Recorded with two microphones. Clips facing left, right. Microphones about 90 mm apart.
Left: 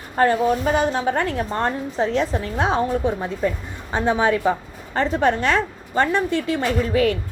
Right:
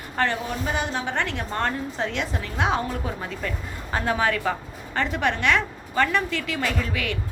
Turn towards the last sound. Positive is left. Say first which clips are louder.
# left 8 dB
turn(degrees=35)  # may be behind; listen again after turning